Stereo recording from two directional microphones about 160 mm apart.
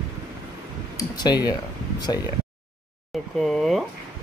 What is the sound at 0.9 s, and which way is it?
Speech, 25° left (ahead or behind).